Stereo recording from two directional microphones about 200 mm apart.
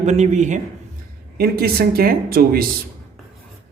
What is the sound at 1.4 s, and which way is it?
Speech, 50° right (ahead or behind).